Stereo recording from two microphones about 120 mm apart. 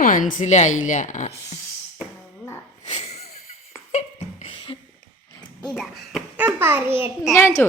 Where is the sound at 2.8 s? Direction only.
65° left (ahead or behind).